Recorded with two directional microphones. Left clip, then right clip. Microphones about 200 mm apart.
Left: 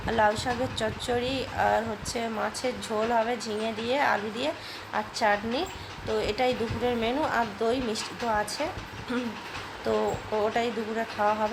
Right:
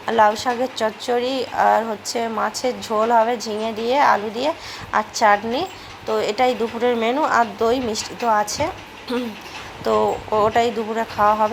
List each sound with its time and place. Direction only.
0.1 s a woman's voice: 10° right (ahead or behind)